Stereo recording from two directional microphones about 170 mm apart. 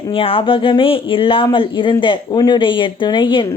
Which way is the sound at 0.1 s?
30° left (ahead or behind).